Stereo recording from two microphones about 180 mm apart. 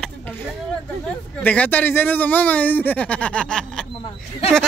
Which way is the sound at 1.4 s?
10° left (ahead or behind).